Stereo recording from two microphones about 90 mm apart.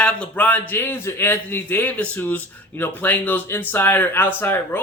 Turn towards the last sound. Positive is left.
turn(degrees=25)  # may be behind; listen again after turning